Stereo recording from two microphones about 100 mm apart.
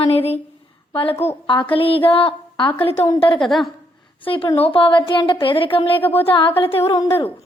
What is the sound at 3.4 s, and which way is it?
Speech, centre (ahead or behind).